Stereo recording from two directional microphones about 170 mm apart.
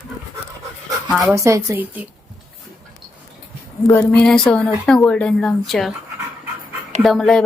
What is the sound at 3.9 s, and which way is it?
Speech, 10° left (ahead or behind).